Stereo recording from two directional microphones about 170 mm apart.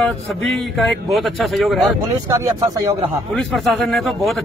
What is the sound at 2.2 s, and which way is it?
Speech, 20° right (ahead or behind).